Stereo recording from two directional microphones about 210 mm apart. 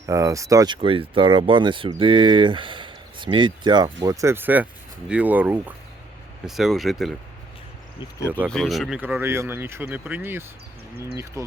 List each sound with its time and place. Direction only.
0.0 s speech: 15° right (ahead or behind)
8.4 s speech: centre (ahead or behind); by 11.5 s 15° right (ahead or behind)